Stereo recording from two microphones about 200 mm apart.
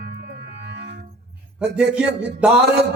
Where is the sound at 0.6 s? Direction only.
60° right (ahead or behind).